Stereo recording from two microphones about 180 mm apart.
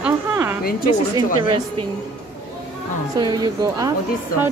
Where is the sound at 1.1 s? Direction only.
25° right (ahead or behind).